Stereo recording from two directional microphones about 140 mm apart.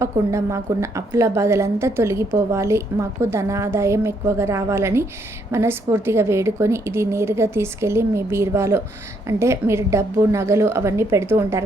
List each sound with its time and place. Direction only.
0.0 s a woman's voice: 20° right (ahead or behind)